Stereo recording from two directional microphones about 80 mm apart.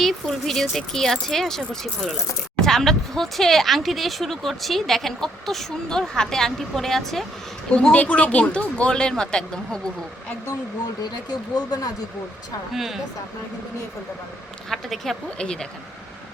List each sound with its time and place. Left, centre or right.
0.0 s speech: centre
2.6 s speech: centre
11.0 s speech: left
12.7 s speech: centre
14.7 s speech: centre